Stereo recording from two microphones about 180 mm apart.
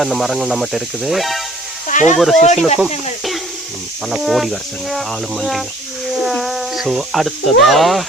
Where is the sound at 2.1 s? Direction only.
Centre (ahead or behind).